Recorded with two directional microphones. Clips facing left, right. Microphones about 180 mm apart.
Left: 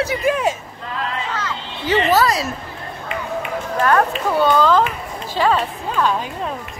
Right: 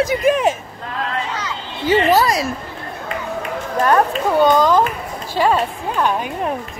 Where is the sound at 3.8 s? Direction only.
15° right (ahead or behind).